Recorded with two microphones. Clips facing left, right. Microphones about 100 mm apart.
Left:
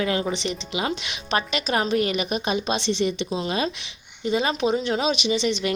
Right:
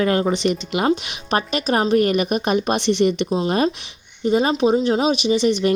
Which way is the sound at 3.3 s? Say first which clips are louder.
Right 6 dB; 40° right (ahead or behind).